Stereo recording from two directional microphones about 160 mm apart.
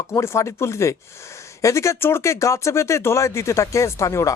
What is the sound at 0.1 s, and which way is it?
Speech, 15° left (ahead or behind).